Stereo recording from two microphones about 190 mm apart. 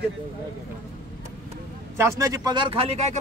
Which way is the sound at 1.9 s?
15° right (ahead or behind).